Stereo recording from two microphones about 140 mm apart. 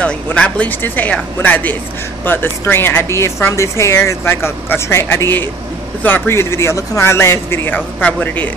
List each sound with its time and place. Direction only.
0.0 s speech: 10° left (ahead or behind)